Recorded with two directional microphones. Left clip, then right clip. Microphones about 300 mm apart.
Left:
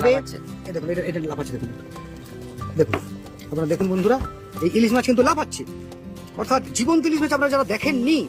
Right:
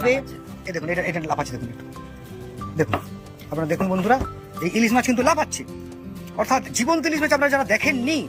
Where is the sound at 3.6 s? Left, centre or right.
Centre.